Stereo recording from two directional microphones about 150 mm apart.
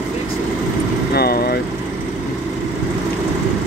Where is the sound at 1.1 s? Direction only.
90° left.